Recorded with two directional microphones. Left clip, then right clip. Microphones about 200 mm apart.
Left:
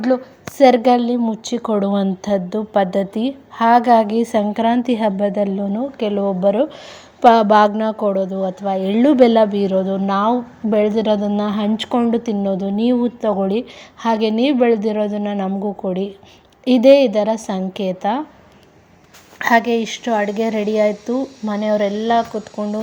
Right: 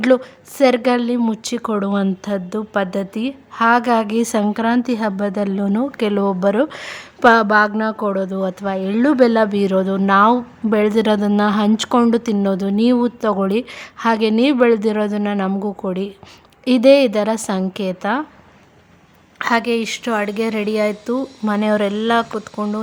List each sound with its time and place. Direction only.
0.5 s a woman's voice: 5° right (ahead or behind); by 6.7 s 20° right (ahead or behind)
6.7 s speech: 60° right (ahead or behind)
6.9 s speech: 10° right (ahead or behind)
19.6 s speech: 10° right (ahead or behind)